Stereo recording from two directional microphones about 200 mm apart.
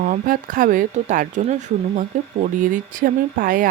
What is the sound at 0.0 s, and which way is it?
Speech, 40° right (ahead or behind).